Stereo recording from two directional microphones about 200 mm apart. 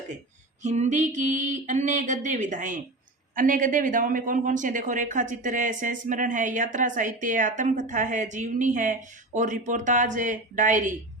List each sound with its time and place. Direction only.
0.6 s speech: 35° right (ahead or behind)